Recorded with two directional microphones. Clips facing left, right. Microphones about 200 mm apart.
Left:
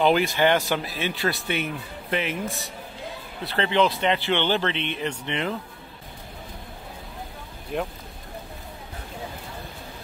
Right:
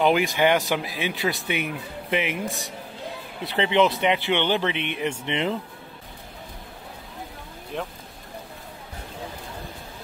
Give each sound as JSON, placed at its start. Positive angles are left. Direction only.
{"t": 0.0, "sound": "speech", "side_deg": -15}
{"t": 2.4, "sound": "a man's voice", "side_deg": 0}
{"t": 3.4, "sound": "speech", "side_deg": -15}
{"t": 7.7, "sound": "a man's voice", "side_deg": 5}